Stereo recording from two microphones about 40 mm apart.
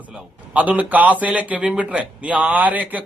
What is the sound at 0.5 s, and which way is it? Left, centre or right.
A man's voice, right.